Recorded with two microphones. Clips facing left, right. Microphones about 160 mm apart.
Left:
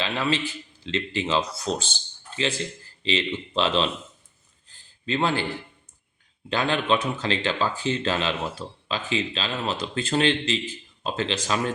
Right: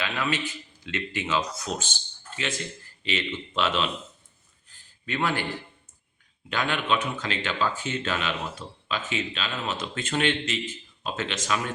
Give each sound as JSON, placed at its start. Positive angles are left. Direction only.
{"t": 0.0, "sound": "speech", "side_deg": 30}
{"t": 5.0, "sound": "a man's voice", "side_deg": 25}
{"t": 6.5, "sound": "speech", "side_deg": 35}